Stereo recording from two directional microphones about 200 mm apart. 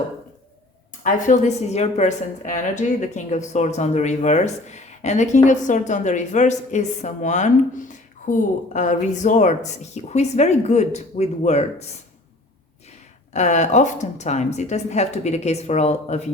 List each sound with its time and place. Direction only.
1.0 s speech: 40° left (ahead or behind)
13.3 s speech: 35° left (ahead or behind)